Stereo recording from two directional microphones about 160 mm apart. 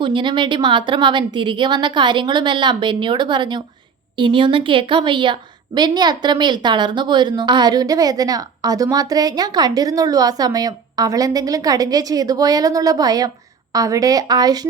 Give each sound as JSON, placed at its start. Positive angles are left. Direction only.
{"t": 0.0, "sound": "a woman's voice", "side_deg": -30}